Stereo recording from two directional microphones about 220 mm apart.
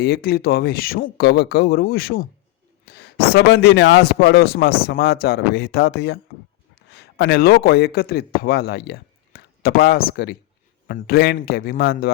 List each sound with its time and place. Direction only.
0.0 s a man's voice: 45° left (ahead or behind)